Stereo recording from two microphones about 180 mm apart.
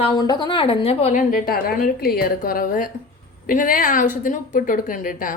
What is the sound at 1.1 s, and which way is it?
A woman's voice, 50° left (ahead or behind).